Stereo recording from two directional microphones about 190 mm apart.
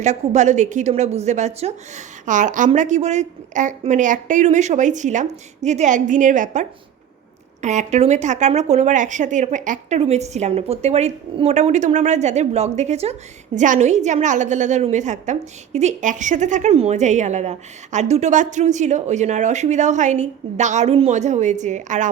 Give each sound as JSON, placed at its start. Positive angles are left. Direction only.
{"t": 0.0, "sound": "speech", "side_deg": -40}